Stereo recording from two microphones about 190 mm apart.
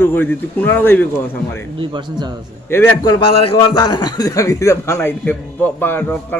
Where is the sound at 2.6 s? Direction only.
10° left (ahead or behind).